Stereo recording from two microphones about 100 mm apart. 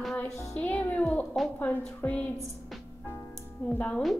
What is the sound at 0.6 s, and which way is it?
A woman's voice, 15° left (ahead or behind).